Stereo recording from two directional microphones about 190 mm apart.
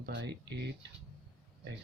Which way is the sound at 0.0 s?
70° right (ahead or behind).